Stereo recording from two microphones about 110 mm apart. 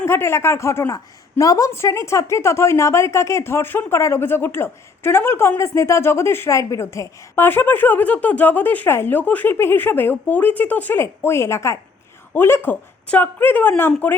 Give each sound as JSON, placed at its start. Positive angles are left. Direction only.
{"t": 0.0, "sound": "a woman's voice", "side_deg": 25}